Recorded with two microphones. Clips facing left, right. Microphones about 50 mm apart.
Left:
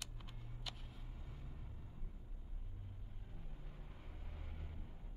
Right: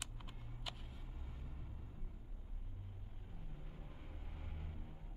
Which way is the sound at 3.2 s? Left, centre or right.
Centre.